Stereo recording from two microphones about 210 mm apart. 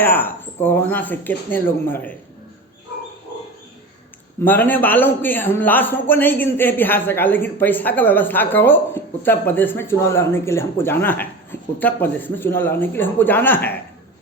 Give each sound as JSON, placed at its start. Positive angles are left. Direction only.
{"t": 0.0, "sound": "a man's voice", "side_deg": 10}
{"t": 4.4, "sound": "a man's voice", "side_deg": 10}